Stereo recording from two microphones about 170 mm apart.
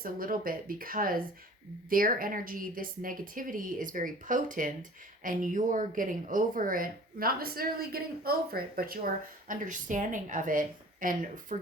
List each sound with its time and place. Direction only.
0.0 s speech: 55° right (ahead or behind)